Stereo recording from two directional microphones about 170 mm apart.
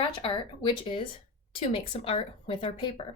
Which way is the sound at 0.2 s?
35° left (ahead or behind).